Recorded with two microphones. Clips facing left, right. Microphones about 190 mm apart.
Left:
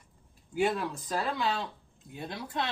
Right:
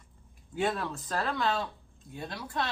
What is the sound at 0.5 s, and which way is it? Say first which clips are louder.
Speech: left 2 dB; 10° left (ahead or behind).